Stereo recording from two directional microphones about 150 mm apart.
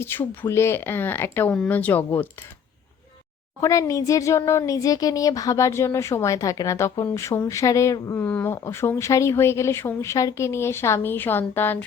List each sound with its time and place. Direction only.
0.0 s speech: 15° left (ahead or behind)
3.6 s speech: 20° left (ahead or behind)